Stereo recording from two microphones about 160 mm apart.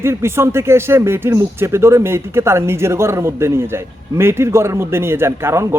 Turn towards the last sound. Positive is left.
turn(degrees=-15)  # may be behind; listen again after turning